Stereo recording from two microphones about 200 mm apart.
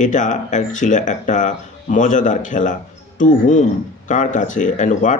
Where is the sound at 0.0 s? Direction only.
40° left (ahead or behind).